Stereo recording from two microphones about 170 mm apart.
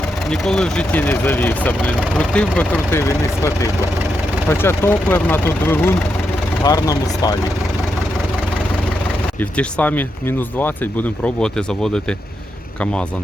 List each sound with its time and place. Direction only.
0.3 s speech: 5° left (ahead or behind); by 7.3 s 20° left (ahead or behind)
9.4 s speech: 10° left (ahead or behind)